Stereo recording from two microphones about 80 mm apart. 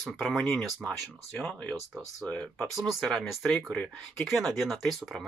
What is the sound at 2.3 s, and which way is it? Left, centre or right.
Speech, centre.